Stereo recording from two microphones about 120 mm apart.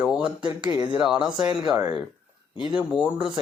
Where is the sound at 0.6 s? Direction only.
40° right (ahead or behind).